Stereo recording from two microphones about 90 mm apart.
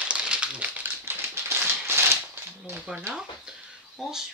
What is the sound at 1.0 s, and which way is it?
Typewriter, 25° right (ahead or behind).